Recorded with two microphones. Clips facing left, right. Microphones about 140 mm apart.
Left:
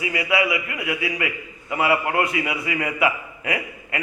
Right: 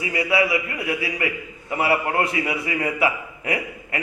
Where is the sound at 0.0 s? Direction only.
30° right (ahead or behind).